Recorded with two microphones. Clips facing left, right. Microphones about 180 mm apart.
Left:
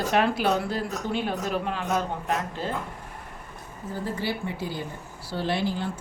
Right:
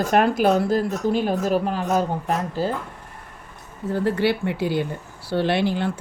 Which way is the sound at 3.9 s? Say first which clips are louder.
Right 9 dB; 70° right (ahead or behind).